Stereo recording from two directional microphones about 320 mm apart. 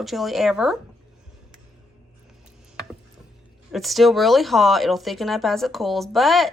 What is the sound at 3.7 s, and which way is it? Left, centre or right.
Speech, centre.